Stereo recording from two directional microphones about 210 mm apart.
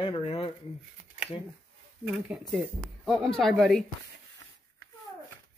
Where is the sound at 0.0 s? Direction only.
25° left (ahead or behind).